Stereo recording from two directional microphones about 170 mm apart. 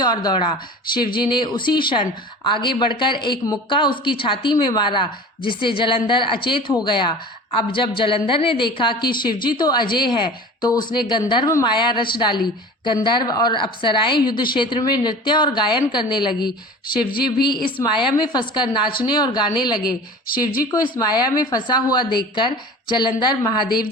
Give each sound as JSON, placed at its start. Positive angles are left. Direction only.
{"t": 0.0, "sound": "a woman's voice", "side_deg": 25}
{"t": 20.3, "sound": "speech", "side_deg": 55}
{"t": 21.0, "sound": "a woman's voice", "side_deg": 25}
{"t": 23.6, "sound": "speech", "side_deg": 60}